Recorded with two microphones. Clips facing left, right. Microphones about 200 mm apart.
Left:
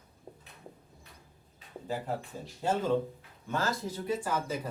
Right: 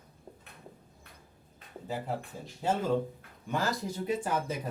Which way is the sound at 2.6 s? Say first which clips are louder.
Even; 10° right (ahead or behind).